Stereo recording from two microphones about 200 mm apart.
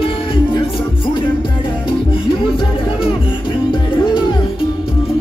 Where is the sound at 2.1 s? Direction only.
25° left (ahead or behind).